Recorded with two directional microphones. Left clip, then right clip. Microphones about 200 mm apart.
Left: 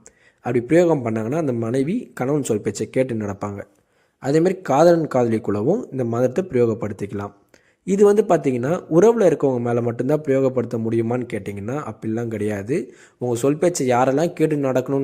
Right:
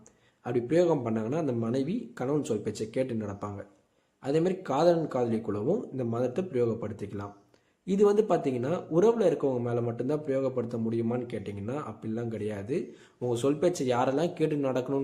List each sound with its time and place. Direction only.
0.4 s speech: 35° left (ahead or behind)